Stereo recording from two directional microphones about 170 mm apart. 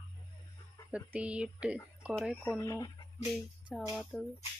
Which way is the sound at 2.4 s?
20° left (ahead or behind).